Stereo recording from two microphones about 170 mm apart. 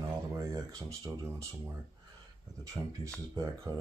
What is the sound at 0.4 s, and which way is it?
Speech, 20° right (ahead or behind).